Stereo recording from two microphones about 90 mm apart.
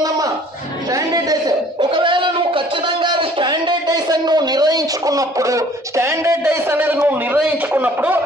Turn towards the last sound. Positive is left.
turn(degrees=-20)  # may be behind; listen again after turning